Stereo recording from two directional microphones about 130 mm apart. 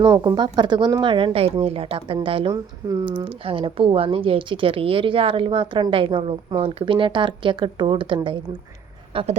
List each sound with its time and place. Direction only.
0.2 s speech: 35° right (ahead or behind)
9.1 s speech: 55° right (ahead or behind)